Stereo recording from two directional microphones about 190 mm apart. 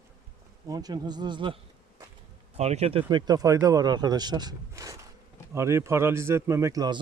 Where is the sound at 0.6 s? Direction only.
20° right (ahead or behind).